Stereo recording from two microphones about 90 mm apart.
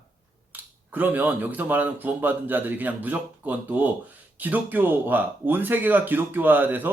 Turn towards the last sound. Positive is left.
turn(degrees=-20)  # may be behind; listen again after turning